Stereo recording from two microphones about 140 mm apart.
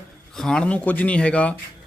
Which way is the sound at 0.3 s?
5° left (ahead or behind).